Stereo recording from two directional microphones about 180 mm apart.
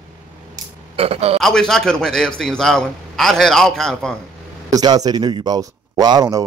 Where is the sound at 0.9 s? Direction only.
35° right (ahead or behind).